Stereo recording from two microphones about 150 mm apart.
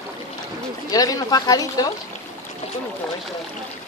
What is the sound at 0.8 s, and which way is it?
Speech, 25° left (ahead or behind).